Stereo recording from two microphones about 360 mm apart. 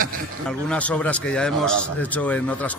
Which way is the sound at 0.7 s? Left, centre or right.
Centre.